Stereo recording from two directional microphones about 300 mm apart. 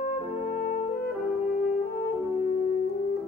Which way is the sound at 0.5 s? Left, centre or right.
Left.